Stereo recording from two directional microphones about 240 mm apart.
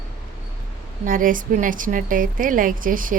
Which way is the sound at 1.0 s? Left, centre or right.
Right.